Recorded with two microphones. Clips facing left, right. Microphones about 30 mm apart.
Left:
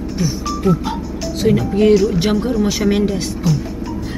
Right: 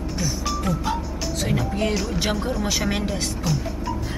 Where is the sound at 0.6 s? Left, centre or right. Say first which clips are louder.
Left 10 dB; centre.